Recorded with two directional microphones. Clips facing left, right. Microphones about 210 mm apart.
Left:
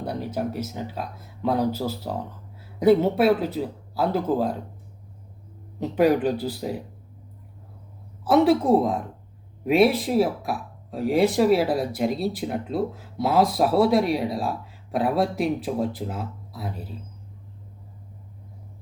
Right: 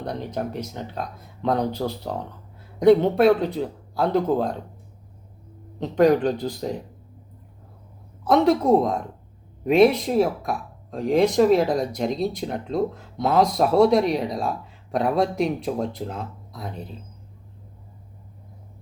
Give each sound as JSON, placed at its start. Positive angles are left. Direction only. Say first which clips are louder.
{"t": 0.0, "sound": "speech", "louder": "left 1 dB", "side_deg": 5}
{"t": 5.8, "sound": "speech", "louder": "right 2 dB", "side_deg": 5}
{"t": 8.2, "sound": "speech", "louder": "even", "side_deg": 5}